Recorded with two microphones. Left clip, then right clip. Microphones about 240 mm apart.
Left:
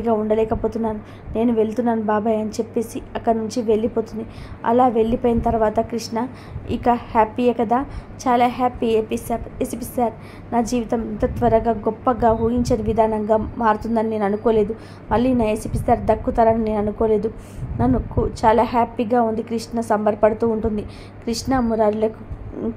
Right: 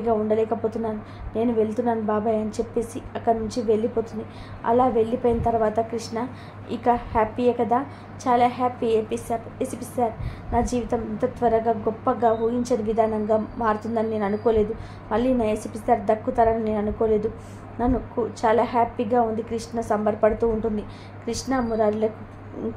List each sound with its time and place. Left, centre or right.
0.0 s a woman's voice: left